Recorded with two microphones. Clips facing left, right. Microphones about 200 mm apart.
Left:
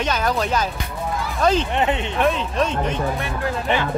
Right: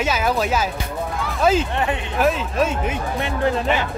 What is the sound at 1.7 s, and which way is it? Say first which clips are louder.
Speech: left 2 dB; 20° left (ahead or behind).